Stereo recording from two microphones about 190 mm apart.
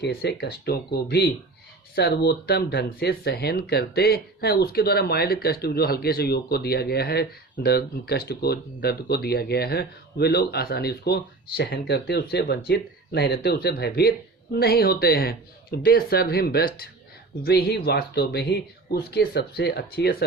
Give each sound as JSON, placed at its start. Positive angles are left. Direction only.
{"t": 0.0, "sound": "speech", "side_deg": 55}